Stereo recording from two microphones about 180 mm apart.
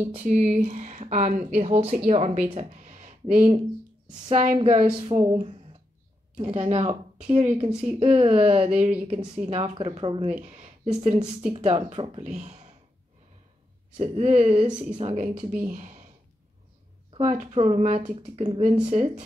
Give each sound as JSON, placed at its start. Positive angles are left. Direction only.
{"t": 0.2, "sound": "speech", "side_deg": -40}
{"t": 2.7, "sound": "a sound", "side_deg": -40}
{"t": 4.3, "sound": "speech", "side_deg": -35}
{"t": 13.9, "sound": "speech", "side_deg": -35}
{"t": 15.6, "sound": "speech", "side_deg": -45}
{"t": 17.2, "sound": "speech", "side_deg": -40}